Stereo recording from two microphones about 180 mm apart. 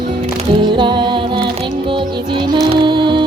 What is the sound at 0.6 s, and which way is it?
Music, 25° right (ahead or behind).